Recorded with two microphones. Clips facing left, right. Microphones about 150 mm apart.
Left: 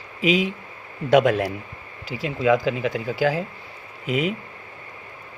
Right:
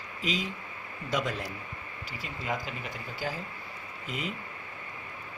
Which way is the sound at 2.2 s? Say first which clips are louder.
Left 15 dB; 90° left.